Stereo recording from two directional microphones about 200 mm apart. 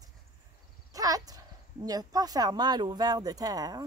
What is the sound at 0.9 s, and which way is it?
Speech, 20° right (ahead or behind).